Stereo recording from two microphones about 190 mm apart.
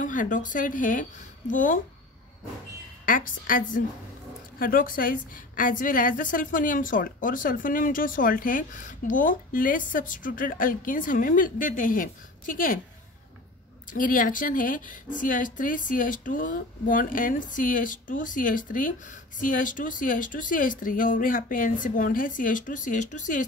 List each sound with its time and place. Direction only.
0.0 s speech: 45° left (ahead or behind)
3.1 s speech: 45° left (ahead or behind)
13.9 s speech: 45° left (ahead or behind)